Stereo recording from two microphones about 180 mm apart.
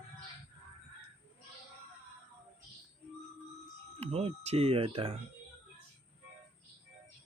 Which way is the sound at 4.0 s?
35° right (ahead or behind).